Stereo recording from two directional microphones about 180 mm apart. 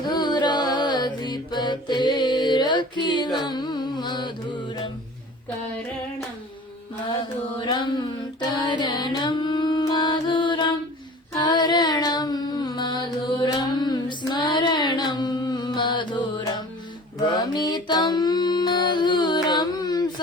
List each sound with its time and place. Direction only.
0.0 s music: 25° left (ahead or behind)
7.7 s mantra: 25° left (ahead or behind)
8.6 s music: 25° left (ahead or behind)
11.3 s a sound: 25° left (ahead or behind)
17.3 s music: 25° left (ahead or behind)